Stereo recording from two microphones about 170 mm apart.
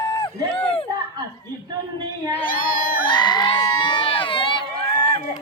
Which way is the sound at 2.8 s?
55° left (ahead or behind).